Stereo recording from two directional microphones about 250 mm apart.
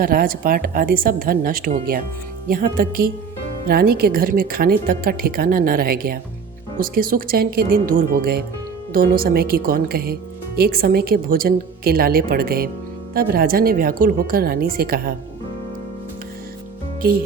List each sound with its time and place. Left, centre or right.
0.0 s speech: right